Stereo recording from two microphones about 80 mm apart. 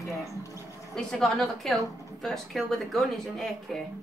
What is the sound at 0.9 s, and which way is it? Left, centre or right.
Speech, centre.